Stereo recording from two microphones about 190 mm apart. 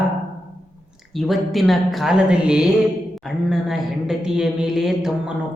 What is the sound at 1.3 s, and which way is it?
A woman's voice, centre (ahead or behind).